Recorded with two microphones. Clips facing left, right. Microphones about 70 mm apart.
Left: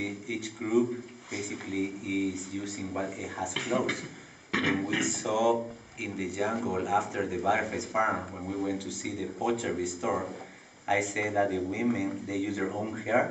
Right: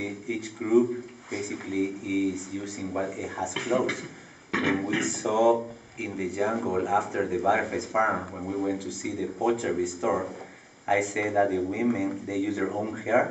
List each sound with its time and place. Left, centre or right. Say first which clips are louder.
0.0 s speech: right 2 dB; centre